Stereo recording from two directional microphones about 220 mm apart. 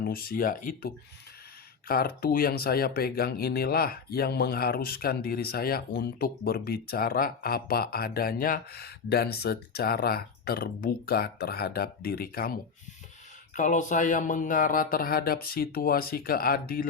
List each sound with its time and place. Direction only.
0.0 s speech: 40° left (ahead or behind)
13.6 s speech: 35° left (ahead or behind)